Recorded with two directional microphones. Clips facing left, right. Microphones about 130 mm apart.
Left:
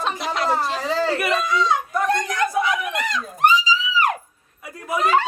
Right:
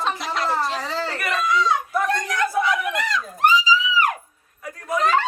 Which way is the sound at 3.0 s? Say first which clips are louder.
Left 2 dB; 20° left (ahead or behind).